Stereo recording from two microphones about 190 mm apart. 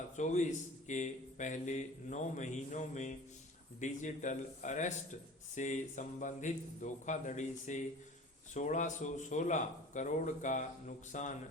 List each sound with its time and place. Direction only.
0.2 s a man's voice: 40° left (ahead or behind)